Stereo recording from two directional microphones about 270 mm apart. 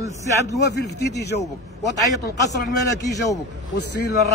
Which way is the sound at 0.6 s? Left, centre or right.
Left.